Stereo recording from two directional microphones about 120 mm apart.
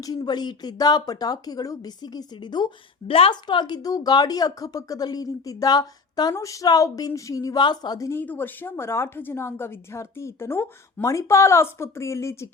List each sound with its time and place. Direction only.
0.0 s a woman's voice: 35° left (ahead or behind)
8.2 s a woman's voice: 15° left (ahead or behind)